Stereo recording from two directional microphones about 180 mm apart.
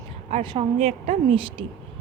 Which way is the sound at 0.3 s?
35° right (ahead or behind).